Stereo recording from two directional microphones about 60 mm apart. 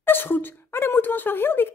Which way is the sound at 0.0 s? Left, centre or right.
Left.